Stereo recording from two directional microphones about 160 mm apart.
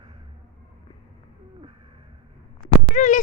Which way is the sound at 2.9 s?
50° left (ahead or behind).